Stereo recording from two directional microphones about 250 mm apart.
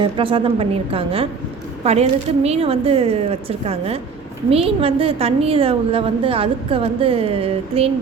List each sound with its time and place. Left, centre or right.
0.0 s a woman's voice: right